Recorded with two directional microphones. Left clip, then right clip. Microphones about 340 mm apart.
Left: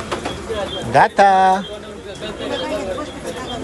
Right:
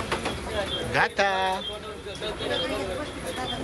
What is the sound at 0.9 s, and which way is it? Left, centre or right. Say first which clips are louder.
Speech: left 12 dB; left.